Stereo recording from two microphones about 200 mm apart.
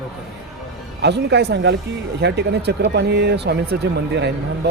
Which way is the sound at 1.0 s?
55° right (ahead or behind).